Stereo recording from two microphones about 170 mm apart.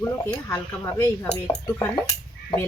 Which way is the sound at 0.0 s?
15° left (ahead or behind).